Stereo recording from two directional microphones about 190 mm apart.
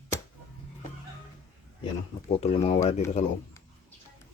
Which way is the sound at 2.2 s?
35° left (ahead or behind).